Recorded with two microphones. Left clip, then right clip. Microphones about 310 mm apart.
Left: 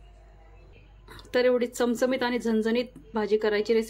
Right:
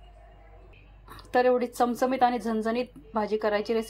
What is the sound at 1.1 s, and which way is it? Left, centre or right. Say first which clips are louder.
A woman's voice: even; centre.